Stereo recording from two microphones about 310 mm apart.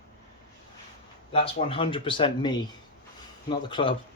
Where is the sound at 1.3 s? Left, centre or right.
Centre.